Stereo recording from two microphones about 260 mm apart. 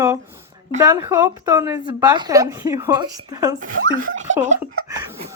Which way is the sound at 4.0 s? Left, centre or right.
Right.